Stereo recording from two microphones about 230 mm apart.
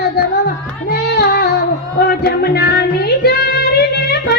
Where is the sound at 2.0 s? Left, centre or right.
Left.